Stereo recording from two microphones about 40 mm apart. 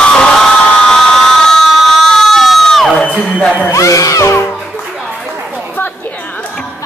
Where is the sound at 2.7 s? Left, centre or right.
Centre.